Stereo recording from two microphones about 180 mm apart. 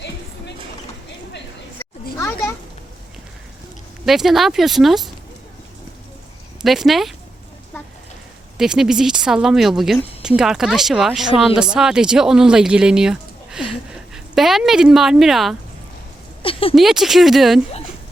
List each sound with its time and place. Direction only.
2.1 s children playing: 15° left (ahead or behind)
4.0 s speech: centre (ahead or behind)
6.6 s speech: centre (ahead or behind)
8.5 s speech: 5° right (ahead or behind)
16.4 s a sound: 30° left (ahead or behind)
16.7 s speech: centre (ahead or behind)